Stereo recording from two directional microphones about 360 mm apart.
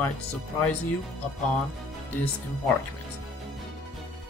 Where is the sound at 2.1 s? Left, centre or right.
Centre.